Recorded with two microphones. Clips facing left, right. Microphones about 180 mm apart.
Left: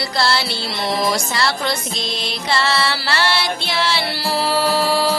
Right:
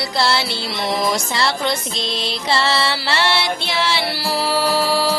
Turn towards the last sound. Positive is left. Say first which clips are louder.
# left 1 dB
turn(degrees=-5)  # may be behind; listen again after turning